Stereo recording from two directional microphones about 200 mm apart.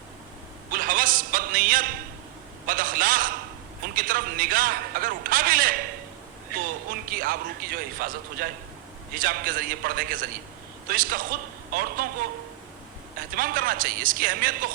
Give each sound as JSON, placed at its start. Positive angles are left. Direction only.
{"t": 0.7, "sound": "a sound", "side_deg": -45}
{"t": 2.6, "sound": "a man's voice", "side_deg": -45}
{"t": 7.1, "sound": "a man's voice", "side_deg": -45}
{"t": 13.1, "sound": "a man's voice", "side_deg": -45}